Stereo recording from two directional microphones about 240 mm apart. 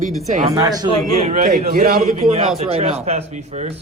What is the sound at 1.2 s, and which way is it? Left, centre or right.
Speech, right.